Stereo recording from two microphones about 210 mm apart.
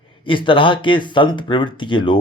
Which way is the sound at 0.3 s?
25° left (ahead or behind).